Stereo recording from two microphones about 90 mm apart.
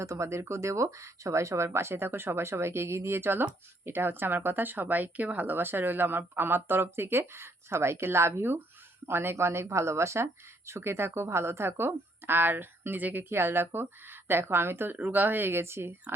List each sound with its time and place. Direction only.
0.0 s speech: 35° right (ahead or behind)